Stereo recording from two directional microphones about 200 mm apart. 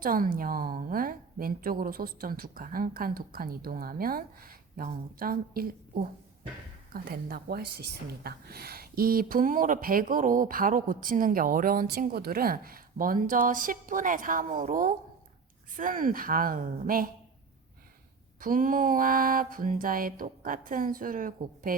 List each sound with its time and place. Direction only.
0.0 s a woman's voice: 45° right (ahead or behind)
18.3 s a woman's voice: 45° right (ahead or behind)